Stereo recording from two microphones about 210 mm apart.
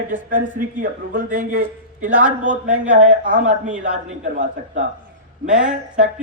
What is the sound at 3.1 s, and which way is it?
A man's voice, 40° right (ahead or behind).